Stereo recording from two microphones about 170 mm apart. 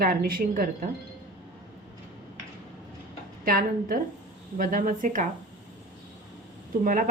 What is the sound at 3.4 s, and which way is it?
A woman's voice, 60° right (ahead or behind).